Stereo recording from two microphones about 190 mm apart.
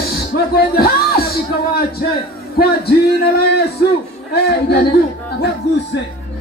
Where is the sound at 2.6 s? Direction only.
55° left (ahead or behind).